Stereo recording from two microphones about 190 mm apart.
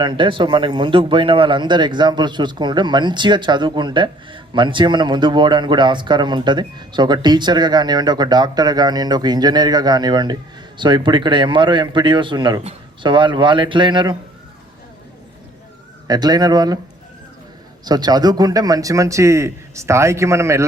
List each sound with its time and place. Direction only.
0.0 s speech: 25° right (ahead or behind)
16.0 s speech: 20° right (ahead or behind)
17.8 s speech: 20° right (ahead or behind)